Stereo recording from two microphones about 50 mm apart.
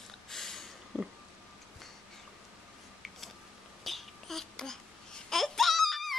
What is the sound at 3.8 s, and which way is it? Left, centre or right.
Babbling, centre.